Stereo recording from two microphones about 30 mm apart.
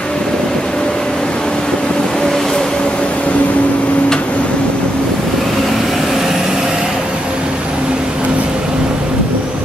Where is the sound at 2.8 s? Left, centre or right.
Left.